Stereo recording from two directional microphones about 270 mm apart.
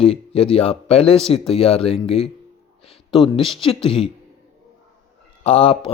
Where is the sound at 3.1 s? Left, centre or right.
Centre.